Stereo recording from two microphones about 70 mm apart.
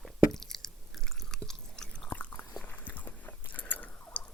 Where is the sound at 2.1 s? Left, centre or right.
Left.